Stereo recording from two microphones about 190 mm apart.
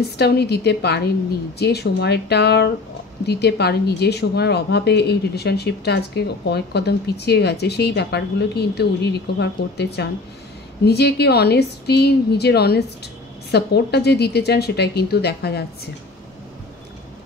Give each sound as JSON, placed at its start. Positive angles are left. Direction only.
{"t": 0.2, "sound": "a woman's voice", "side_deg": 60}